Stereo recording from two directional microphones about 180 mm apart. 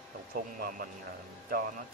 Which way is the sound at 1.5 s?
50° right (ahead or behind).